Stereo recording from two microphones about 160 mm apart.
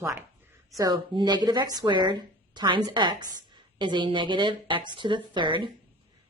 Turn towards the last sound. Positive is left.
turn(degrees=-30)  # may be behind; listen again after turning